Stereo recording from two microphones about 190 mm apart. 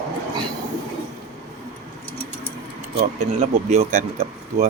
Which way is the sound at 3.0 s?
35° right (ahead or behind).